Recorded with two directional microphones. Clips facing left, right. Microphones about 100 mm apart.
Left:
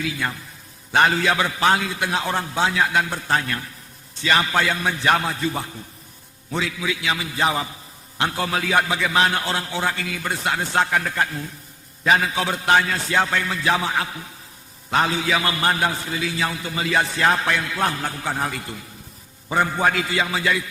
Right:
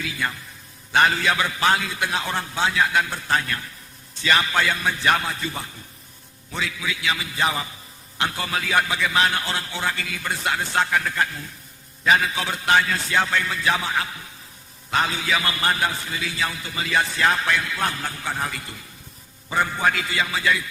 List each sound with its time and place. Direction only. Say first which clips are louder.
0.9 s a man's voice: left 1 dB; 35° left (ahead or behind)